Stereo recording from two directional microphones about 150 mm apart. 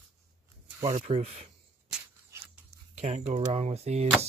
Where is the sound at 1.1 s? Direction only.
45° right (ahead or behind).